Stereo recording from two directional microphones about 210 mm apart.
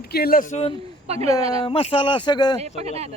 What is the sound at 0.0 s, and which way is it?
Speech, 45° left (ahead or behind).